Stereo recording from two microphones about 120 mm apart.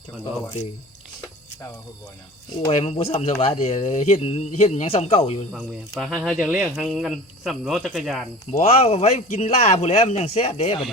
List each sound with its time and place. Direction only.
2.7 s speech: 60° left (ahead or behind)
6.0 s speech: centre (ahead or behind)
8.4 s speech: 65° left (ahead or behind)